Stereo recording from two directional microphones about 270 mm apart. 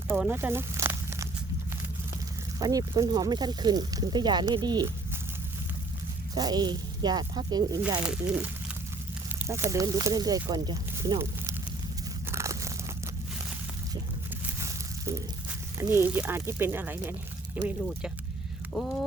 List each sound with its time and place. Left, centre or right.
0.1 s a sound: centre
2.6 s speech: centre
6.3 s speech: centre
8.0 s speech: centre
9.5 s speech: centre
12.3 s crumpling: centre
15.8 s speech: centre
18.7 s speech: centre